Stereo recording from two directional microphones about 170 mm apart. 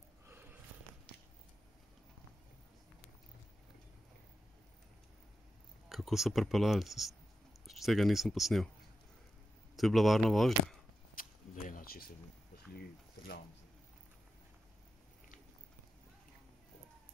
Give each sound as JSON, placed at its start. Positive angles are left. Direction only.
{"t": 5.9, "sound": "speech", "side_deg": 0}
{"t": 9.8, "sound": "speech", "side_deg": 0}
{"t": 11.1, "sound": "a sound", "side_deg": 50}